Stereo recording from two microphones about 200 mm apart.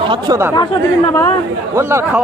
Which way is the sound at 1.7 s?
15° right (ahead or behind).